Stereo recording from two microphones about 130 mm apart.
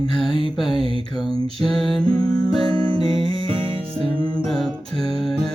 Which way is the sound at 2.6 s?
45° right (ahead or behind).